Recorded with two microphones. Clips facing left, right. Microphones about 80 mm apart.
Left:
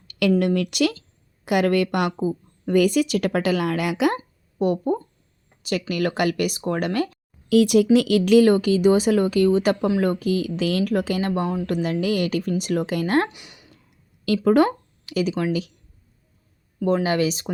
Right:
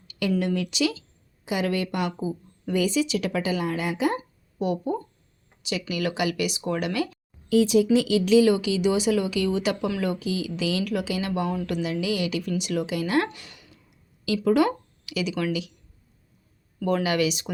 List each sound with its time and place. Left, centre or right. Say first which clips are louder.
0.1 s a woman's voice: left 5 dB; left
2.1 s a woman's voice: left 5 dB; left
4.6 s speech: left 5 dB; left
7.5 s a woman's voice: left 3 dB; left
13.3 s speech: even; centre
14.3 s speech: left 3 dB; left
16.8 s speech: left 3 dB; left